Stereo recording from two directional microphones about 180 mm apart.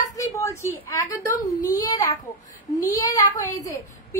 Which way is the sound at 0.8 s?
15° left (ahead or behind).